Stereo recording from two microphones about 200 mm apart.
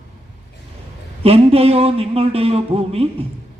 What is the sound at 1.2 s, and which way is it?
A man's voice, 30° right (ahead or behind).